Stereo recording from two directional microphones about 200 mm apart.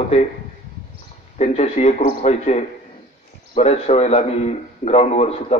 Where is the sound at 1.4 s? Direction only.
35° left (ahead or behind).